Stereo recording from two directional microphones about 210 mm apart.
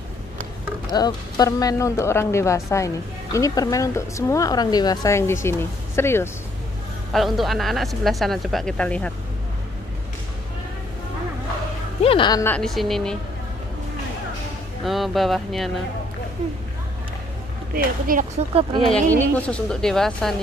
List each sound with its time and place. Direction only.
0.9 s speech: 20° left (ahead or behind)
7.1 s speech: centre (ahead or behind)
12.0 s speech: 25° left (ahead or behind)
12.5 s speech: centre (ahead or behind)
14.9 s speech: centre (ahead or behind)
17.7 s speech: 40° right (ahead or behind)
19.0 s speech: 10° left (ahead or behind)